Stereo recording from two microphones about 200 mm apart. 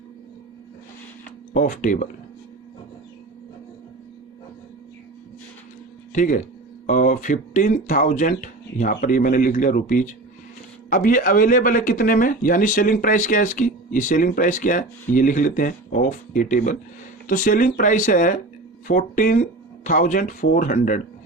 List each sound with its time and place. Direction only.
1.5 s speech: 40° left (ahead or behind)
6.1 s speech: 40° left (ahead or behind)